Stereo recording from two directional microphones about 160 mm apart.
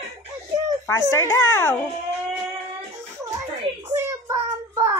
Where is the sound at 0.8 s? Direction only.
15° left (ahead or behind).